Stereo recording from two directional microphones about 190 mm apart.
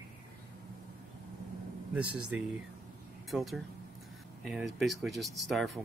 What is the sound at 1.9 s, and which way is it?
Speech, 5° right (ahead or behind).